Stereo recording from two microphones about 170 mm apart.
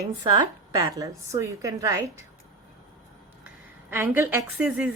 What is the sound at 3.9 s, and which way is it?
Speech, 10° right (ahead or behind).